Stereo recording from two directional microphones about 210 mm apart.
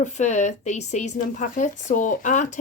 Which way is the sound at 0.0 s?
35° left (ahead or behind).